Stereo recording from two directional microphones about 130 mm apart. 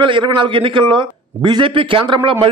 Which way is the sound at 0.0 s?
40° right (ahead or behind).